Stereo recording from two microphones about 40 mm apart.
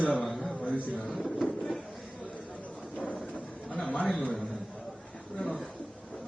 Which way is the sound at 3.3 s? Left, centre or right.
Left.